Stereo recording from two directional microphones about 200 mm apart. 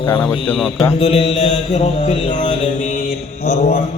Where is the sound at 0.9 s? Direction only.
30° left (ahead or behind).